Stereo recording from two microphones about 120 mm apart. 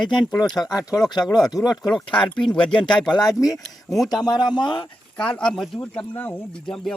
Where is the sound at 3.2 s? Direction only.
30° left (ahead or behind).